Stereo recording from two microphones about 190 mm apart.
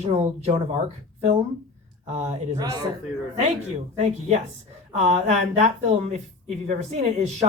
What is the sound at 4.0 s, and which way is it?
Speech, 40° right (ahead or behind).